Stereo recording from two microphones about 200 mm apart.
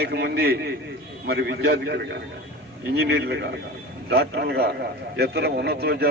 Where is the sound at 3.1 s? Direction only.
60° right (ahead or behind).